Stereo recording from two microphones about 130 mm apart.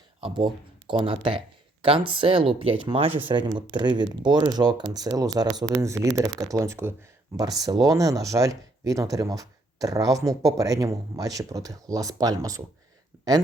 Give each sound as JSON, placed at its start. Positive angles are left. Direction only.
{"t": 0.2, "sound": "speech", "side_deg": -40}